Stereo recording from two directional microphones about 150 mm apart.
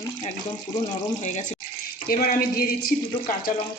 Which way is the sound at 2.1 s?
70° left (ahead or behind).